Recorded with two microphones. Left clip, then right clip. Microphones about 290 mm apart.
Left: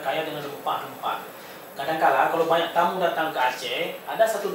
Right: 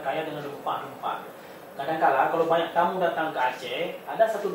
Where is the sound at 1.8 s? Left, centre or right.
Centre.